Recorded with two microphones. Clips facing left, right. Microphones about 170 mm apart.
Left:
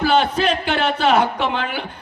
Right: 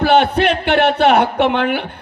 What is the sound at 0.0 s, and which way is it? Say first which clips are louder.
A man's voice: right 4 dB; 65° right (ahead or behind).